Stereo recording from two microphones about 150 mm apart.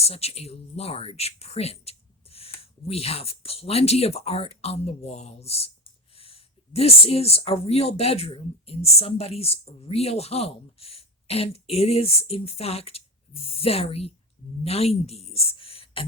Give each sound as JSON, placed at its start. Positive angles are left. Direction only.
{"t": 0.0, "sound": "a woman's voice", "side_deg": 45}